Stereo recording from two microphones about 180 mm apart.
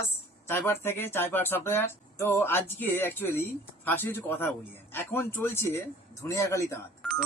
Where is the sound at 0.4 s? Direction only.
15° left (ahead or behind).